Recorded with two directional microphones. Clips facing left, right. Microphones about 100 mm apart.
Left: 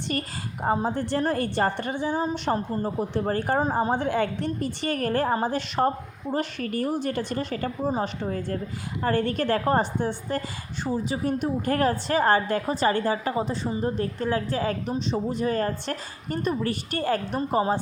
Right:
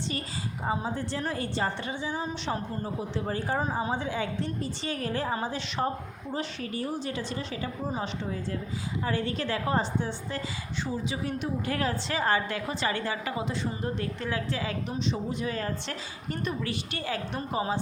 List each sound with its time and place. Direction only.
0.1 s a woman's voice: 55° left (ahead or behind)